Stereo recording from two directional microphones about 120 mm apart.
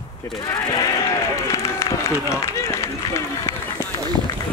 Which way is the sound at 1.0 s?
25° left (ahead or behind).